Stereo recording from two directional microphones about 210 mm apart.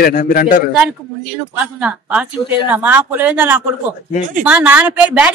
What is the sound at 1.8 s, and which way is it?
A woman's voice, 5° right (ahead or behind).